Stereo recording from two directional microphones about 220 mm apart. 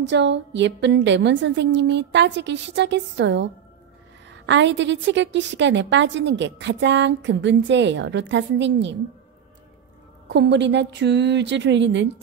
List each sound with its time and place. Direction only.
0.0 s a woman's voice: 55° right (ahead or behind)
10.3 s a woman's voice: 50° right (ahead or behind)